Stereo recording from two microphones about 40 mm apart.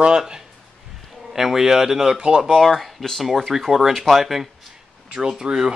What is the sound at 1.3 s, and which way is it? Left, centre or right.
Speech, centre.